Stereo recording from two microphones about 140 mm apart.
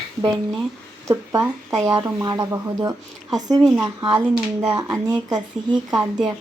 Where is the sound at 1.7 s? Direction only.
25° right (ahead or behind).